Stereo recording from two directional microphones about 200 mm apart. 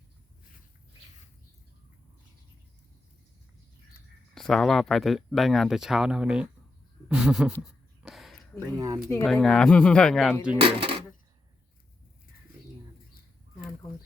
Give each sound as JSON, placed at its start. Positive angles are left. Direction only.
{"t": 4.4, "sound": "speech", "side_deg": 0}
{"t": 8.0, "sound": "a sound", "side_deg": 0}
{"t": 8.5, "sound": "speech", "side_deg": -15}
{"t": 9.2, "sound": "speech", "side_deg": 0}
{"t": 10.6, "sound": "speech", "side_deg": -25}